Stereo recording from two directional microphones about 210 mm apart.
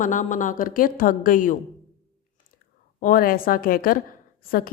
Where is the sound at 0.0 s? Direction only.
35° left (ahead or behind).